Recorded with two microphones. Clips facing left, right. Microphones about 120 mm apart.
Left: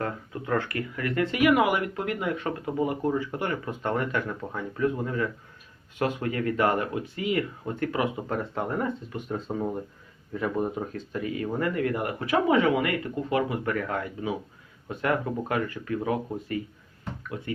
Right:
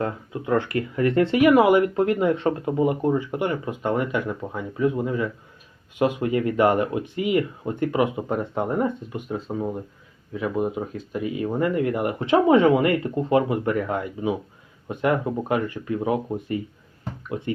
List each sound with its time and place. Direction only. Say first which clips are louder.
0.0 s speech: right 4 dB; 20° right (ahead or behind)
9.3 s speech: right 2 dB; centre (ahead or behind); by 16.6 s 20° right (ahead or behind)
17.0 s a sound: right 5 dB; 25° right (ahead or behind)